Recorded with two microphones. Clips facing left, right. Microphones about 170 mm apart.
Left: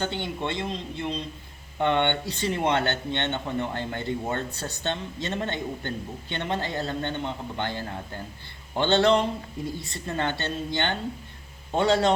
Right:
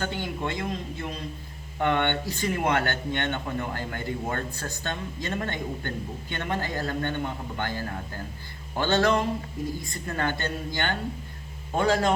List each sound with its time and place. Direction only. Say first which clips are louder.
0.0 s a man's voice: left 1 dB; 25° left (ahead or behind)